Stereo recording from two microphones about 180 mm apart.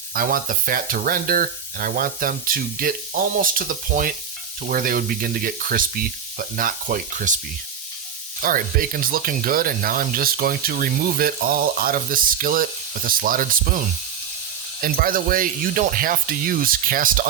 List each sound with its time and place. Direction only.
0.1 s speech: 50° right (ahead or behind)
8.4 s speech: 50° right (ahead or behind)